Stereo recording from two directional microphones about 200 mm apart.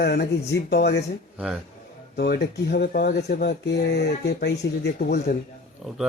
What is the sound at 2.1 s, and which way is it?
Speech, 55° left (ahead or behind).